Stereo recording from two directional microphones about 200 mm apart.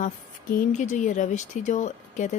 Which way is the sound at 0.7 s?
40° left (ahead or behind).